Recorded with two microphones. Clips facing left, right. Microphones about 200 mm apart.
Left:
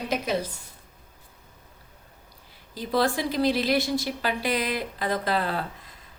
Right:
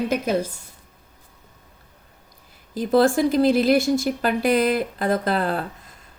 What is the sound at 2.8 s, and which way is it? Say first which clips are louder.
Speech: right 8 dB; 50° right (ahead or behind).